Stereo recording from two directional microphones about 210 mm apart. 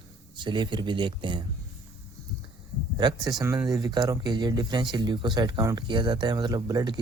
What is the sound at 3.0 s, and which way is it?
Speech, 20° right (ahead or behind).